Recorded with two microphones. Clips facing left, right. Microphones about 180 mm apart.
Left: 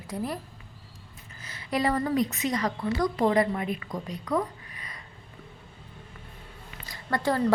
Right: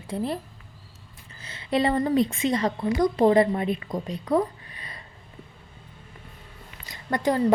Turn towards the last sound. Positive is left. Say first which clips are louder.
# right 3 dB
turn(degrees=-20)  # may be behind; listen again after turning